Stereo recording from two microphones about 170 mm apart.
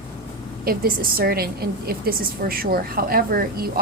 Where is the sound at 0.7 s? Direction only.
60° right (ahead or behind).